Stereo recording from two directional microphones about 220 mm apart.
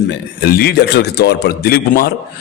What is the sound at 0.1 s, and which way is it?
A man's voice, 45° left (ahead or behind).